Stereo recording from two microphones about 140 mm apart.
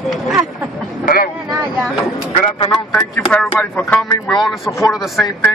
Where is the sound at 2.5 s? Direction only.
40° left (ahead or behind).